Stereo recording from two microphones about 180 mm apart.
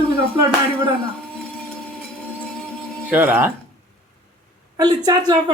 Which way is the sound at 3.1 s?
10° right (ahead or behind).